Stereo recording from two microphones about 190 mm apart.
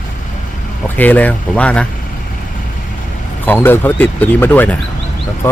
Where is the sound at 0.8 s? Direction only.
10° left (ahead or behind).